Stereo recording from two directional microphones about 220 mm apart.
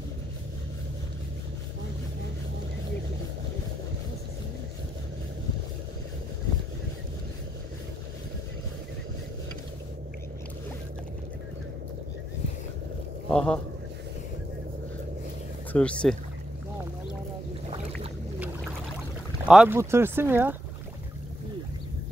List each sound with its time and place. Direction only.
13.3 s a man's voice: 5° left (ahead or behind)
15.7 s speech: 5° left (ahead or behind)
19.4 s speech: 5° right (ahead or behind)